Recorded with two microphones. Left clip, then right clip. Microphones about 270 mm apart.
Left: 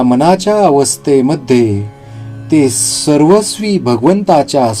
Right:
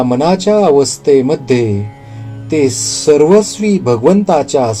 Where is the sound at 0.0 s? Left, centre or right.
Left.